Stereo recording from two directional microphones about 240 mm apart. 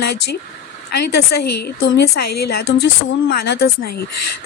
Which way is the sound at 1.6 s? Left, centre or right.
Left.